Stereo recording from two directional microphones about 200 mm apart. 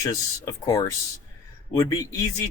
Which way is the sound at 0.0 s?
20° left (ahead or behind).